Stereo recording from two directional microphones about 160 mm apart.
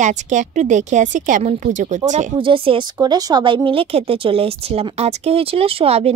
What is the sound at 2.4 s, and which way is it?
Speech, 35° right (ahead or behind).